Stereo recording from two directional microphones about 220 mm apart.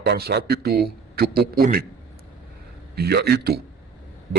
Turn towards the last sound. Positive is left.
turn(degrees=-45)  # may be behind; listen again after turning